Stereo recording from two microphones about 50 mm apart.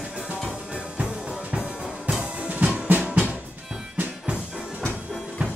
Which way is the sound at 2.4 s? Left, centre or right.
Right.